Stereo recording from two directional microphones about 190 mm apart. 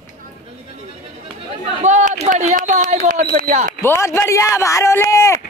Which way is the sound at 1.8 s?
40° right (ahead or behind).